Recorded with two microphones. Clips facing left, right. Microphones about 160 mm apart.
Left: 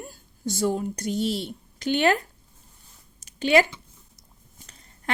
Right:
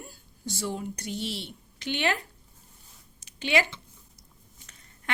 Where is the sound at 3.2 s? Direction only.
45° left (ahead or behind).